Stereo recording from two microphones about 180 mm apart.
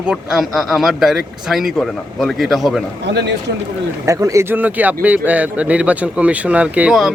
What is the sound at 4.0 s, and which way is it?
Speech, 20° right (ahead or behind).